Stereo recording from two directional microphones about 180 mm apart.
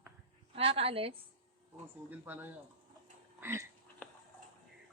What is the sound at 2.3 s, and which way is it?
Speech, 15° right (ahead or behind).